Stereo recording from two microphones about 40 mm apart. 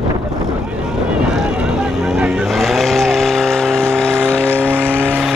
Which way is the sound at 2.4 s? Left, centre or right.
Centre.